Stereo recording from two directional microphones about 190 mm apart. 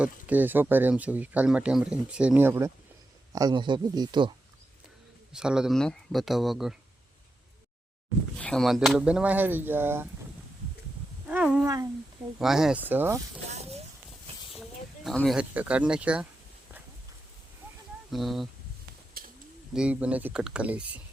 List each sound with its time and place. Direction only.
0.0 s speech: 10° right (ahead or behind)
5.3 s speech: 5° right (ahead or behind)
8.4 s speech: 5° left (ahead or behind); by 10.1 s 10° right (ahead or behind)
11.3 s a sound: 5° right (ahead or behind)
12.4 s speech: centre (ahead or behind)
13.5 s a sound: 35° right (ahead or behind)
14.5 s a sound: centre (ahead or behind)
15.4 s speech: 5° right (ahead or behind)
18.1 s speech: centre (ahead or behind)
19.7 s speech: 5° right (ahead or behind)